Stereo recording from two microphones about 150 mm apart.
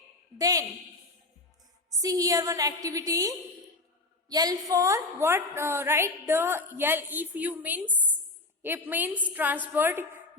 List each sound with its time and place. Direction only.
0.3 s a woman's voice: 25° right (ahead or behind)
2.0 s a woman's voice: 25° right (ahead or behind)